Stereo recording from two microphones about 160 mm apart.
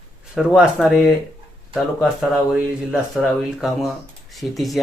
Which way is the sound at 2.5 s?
5° right (ahead or behind).